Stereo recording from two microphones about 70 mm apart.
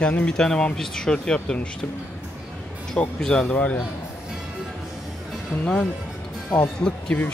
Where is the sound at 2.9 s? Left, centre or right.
Centre.